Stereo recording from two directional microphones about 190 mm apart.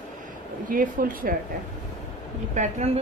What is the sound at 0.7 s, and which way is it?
Speech, 45° right (ahead or behind).